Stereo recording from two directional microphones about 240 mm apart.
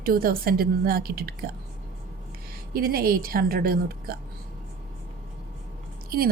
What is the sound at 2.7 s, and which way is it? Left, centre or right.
A woman's voice, right.